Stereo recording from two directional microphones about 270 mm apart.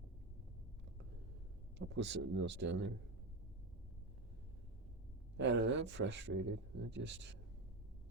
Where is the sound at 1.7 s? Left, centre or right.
Right.